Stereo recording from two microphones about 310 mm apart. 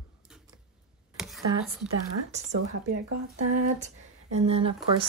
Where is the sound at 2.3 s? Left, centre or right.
Right.